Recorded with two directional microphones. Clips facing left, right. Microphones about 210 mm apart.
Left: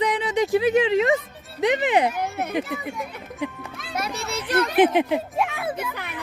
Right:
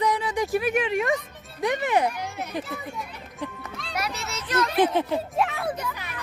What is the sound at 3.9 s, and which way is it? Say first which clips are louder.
Children playing: left 3 dB; 30° left (ahead or behind).